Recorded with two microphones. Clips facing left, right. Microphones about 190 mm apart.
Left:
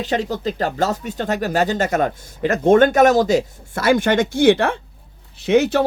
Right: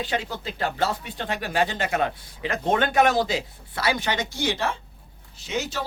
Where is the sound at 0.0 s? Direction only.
45° left (ahead or behind).